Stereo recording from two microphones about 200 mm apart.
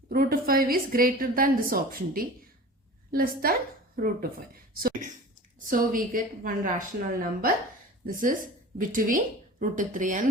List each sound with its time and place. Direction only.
0.1 s a woman's voice: 45° right (ahead or behind)